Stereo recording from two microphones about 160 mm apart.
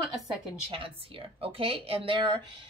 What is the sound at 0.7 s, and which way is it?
Speech, 35° right (ahead or behind).